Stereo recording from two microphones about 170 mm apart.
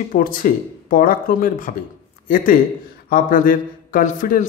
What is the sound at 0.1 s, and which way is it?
A man's voice, 55° left (ahead or behind).